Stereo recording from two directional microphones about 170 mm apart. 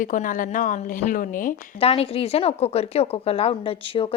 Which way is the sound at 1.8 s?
35° left (ahead or behind).